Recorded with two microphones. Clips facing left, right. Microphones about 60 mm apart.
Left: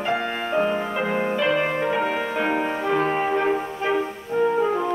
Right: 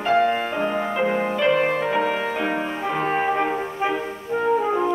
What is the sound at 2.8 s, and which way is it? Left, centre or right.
Music, centre.